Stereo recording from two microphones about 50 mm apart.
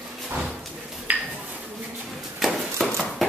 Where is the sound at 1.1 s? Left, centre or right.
Right.